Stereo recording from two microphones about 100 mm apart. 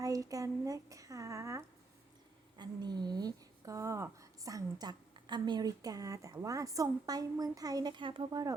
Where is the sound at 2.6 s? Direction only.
45° right (ahead or behind).